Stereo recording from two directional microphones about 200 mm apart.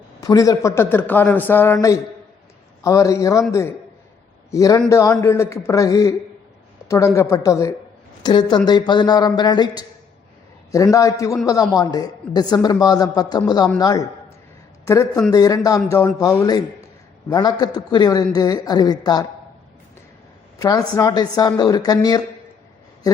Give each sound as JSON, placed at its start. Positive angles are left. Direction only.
{"t": 0.2, "sound": "a man's voice", "side_deg": 15}
{"t": 20.6, "sound": "a woman's voice", "side_deg": 20}